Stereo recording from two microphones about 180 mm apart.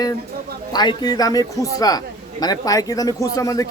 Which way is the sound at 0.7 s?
25° left (ahead or behind).